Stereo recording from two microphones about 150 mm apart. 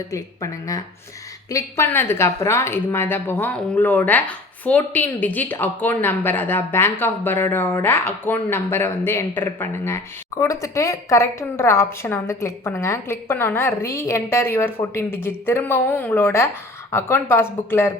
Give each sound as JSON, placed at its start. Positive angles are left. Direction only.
{"t": 0.1, "sound": "a woman's voice", "side_deg": 20}